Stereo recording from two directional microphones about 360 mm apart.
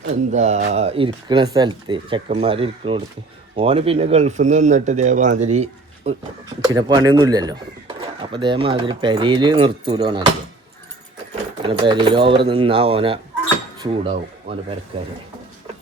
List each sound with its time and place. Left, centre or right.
0.3 s a man's voice: centre
11.6 s speech: centre